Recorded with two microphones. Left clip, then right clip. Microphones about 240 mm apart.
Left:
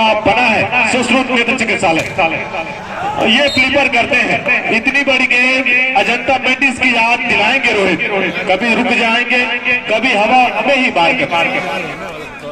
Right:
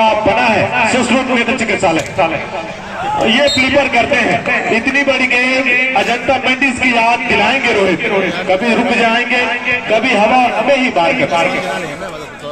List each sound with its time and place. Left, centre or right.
0.0 s a man's voice: left
3.5 s a man's voice: left